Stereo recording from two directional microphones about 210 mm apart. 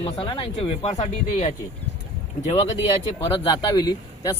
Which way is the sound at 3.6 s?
20° left (ahead or behind).